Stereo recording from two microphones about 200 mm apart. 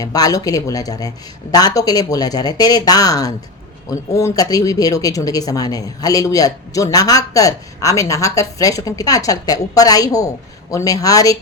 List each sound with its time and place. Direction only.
0.0 s speech: 20° left (ahead or behind)